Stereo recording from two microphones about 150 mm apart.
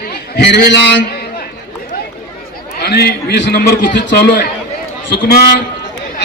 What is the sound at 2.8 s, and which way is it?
A man's voice, 90° left.